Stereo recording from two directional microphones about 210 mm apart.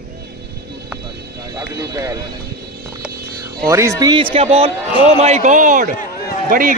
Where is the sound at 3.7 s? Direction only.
15° right (ahead or behind).